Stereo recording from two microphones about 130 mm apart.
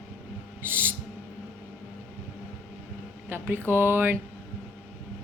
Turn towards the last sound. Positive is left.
turn(degrees=-15)  # may be behind; listen again after turning